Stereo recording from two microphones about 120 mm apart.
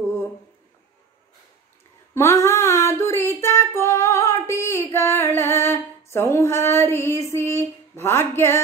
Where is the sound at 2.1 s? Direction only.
25° left (ahead or behind).